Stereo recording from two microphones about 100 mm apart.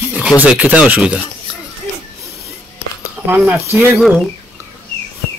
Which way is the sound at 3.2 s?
20° right (ahead or behind).